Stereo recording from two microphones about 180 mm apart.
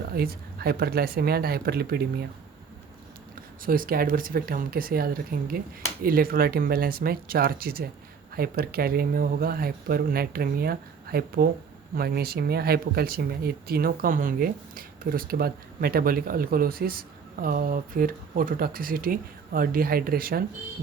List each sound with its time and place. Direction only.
0.2 s speech: 60° right (ahead or behind)
3.6 s speech: 50° right (ahead or behind)